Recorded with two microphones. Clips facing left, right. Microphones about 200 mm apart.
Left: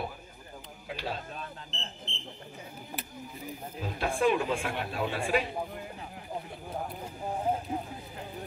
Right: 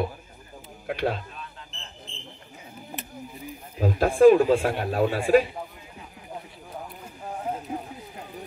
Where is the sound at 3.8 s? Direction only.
40° right (ahead or behind).